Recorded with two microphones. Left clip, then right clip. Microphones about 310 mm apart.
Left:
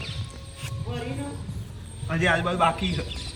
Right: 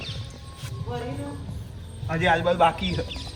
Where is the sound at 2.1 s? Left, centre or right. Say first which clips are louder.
Right 2 dB; right.